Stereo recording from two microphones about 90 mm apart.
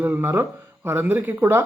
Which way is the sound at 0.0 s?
20° right (ahead or behind).